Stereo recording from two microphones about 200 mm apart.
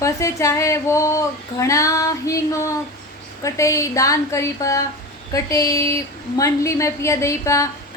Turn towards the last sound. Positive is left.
turn(degrees=15)  # may be behind; listen again after turning